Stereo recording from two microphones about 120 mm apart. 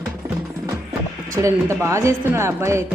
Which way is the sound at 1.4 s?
25° right (ahead or behind).